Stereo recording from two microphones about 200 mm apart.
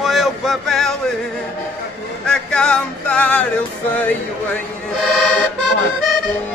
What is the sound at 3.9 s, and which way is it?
Music, 5° left (ahead or behind).